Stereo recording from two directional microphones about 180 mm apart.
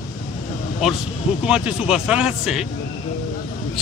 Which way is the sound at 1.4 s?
5° right (ahead or behind).